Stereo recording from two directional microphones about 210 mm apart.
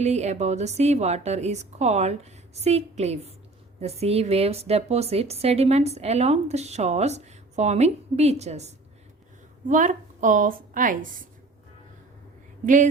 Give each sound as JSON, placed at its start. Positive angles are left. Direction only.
{"t": 0.0, "sound": "speech", "side_deg": -30}
{"t": 12.6, "sound": "speech", "side_deg": -35}